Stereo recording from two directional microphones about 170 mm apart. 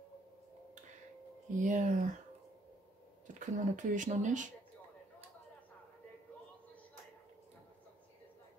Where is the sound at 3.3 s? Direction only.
45° right (ahead or behind).